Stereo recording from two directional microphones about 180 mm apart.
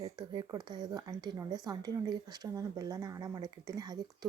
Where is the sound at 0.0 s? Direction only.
25° right (ahead or behind).